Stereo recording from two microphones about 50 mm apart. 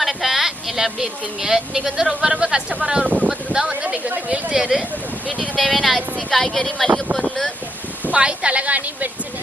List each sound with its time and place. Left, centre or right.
0.0 s speech: centre; by 4.1 s right
4.5 s speech: centre
5.6 s speech: centre
8.0 s a woman's voice: right